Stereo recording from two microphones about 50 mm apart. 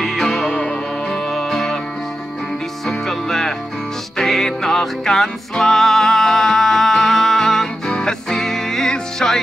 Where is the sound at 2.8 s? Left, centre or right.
Centre.